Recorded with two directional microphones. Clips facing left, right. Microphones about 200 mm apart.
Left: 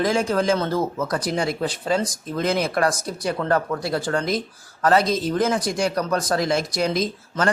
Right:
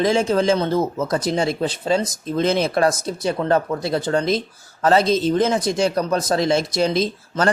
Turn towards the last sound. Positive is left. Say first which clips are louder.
# right 3 dB
turn(degrees=-25)  # may be behind; listen again after turning